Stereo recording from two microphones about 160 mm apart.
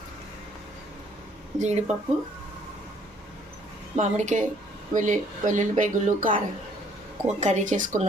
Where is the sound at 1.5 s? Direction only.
45° right (ahead or behind).